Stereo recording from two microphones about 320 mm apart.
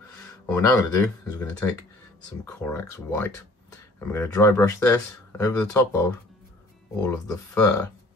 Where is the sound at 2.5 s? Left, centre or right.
Centre.